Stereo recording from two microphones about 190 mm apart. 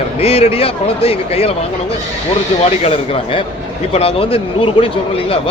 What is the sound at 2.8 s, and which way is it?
Speech, 30° left (ahead or behind).